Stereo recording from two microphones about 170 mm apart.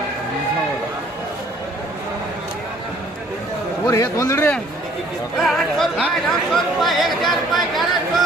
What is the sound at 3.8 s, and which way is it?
A man's voice, 20° left (ahead or behind).